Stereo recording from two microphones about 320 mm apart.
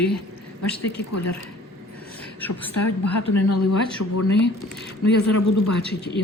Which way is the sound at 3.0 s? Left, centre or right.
Left.